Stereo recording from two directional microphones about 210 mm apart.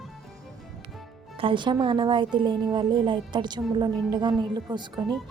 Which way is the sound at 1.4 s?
25° right (ahead or behind).